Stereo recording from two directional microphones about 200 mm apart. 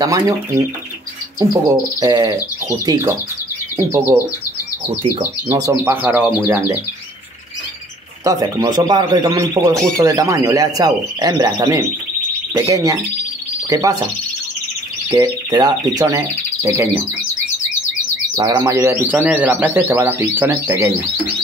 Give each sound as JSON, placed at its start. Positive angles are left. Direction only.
{"t": 0.0, "sound": "speech", "side_deg": -15}
{"t": 8.2, "sound": "speech", "side_deg": -15}
{"t": 15.0, "sound": "speech", "side_deg": -20}
{"t": 18.3, "sound": "speech", "side_deg": -20}